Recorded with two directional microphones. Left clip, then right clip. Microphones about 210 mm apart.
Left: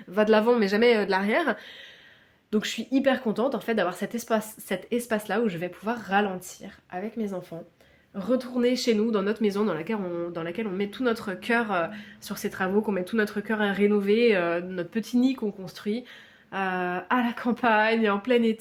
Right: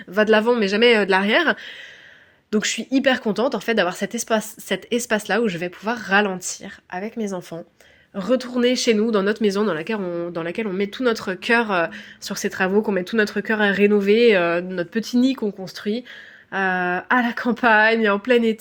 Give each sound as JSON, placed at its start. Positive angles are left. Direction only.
{"t": 0.1, "sound": "speech", "side_deg": -15}
{"t": 0.9, "sound": "speech", "side_deg": -30}